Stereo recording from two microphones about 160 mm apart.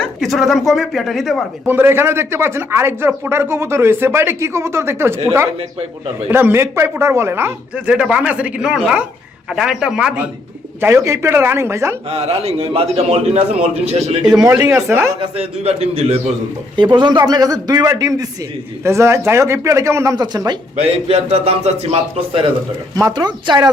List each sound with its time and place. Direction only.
0.0 s a woman's voice: centre (ahead or behind)
1.6 s a woman's voice: 15° right (ahead or behind)
10.8 s speech: 15° right (ahead or behind)
12.0 s a man's voice: 40° right (ahead or behind)
14.4 s speech: 15° right (ahead or behind)
15.2 s a man's voice: 40° right (ahead or behind)
16.7 s a man's voice: 30° right (ahead or behind)
21.1 s a man's voice: 40° right (ahead or behind)
23.0 s a man's voice: 25° right (ahead or behind)